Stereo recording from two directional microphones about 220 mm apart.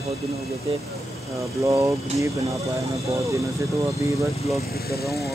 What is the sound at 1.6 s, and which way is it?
Speech, 15° right (ahead or behind).